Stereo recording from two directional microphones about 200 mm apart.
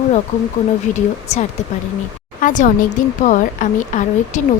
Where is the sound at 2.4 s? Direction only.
40° left (ahead or behind).